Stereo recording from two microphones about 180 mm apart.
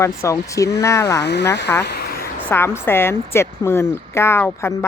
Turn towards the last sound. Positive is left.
turn(degrees=15)  # may be behind; listen again after turning